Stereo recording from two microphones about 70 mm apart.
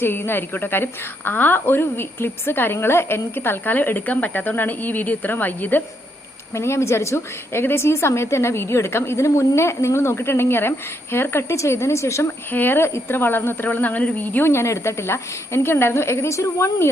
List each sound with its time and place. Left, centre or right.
0.0 s a woman's voice: left
6.5 s a woman's voice: left
12.5 s a woman's voice: left
14.5 s a woman's voice: left